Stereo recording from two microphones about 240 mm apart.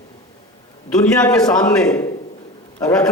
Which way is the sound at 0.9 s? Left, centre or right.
Centre.